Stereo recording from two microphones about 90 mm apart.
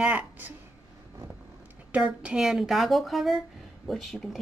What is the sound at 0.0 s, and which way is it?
Speech, 15° right (ahead or behind).